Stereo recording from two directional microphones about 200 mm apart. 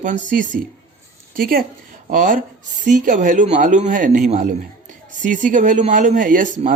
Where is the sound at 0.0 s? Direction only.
40° right (ahead or behind).